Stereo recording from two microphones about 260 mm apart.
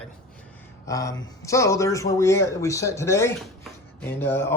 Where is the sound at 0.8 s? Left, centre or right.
Centre.